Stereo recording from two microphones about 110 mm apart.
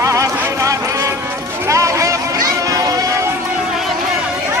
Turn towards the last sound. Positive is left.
turn(degrees=-30)  # may be behind; listen again after turning